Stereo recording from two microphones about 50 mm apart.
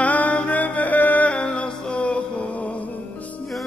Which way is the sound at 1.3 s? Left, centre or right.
Left.